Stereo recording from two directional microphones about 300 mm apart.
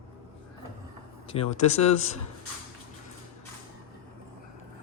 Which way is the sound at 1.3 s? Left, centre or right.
Left.